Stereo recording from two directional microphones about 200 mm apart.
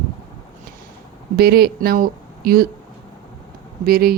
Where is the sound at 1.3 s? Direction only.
55° right (ahead or behind).